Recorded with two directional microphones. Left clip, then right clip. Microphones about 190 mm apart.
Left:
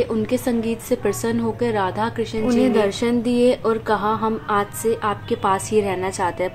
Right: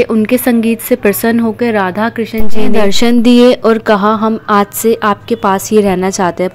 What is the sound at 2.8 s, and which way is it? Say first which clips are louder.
Speech: right 9 dB; 50° right (ahead or behind).